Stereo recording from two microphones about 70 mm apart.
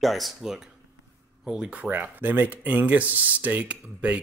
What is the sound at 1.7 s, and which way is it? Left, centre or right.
Speech, right.